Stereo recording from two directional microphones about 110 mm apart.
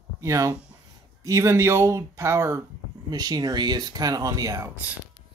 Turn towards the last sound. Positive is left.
turn(degrees=-30)  # may be behind; listen again after turning